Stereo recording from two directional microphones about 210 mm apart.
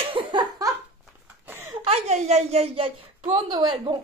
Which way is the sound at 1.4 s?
10° right (ahead or behind).